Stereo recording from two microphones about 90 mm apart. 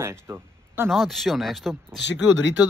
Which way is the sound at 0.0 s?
30° right (ahead or behind).